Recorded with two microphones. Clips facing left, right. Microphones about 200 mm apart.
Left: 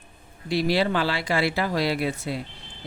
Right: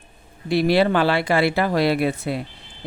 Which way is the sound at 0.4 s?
60° right (ahead or behind).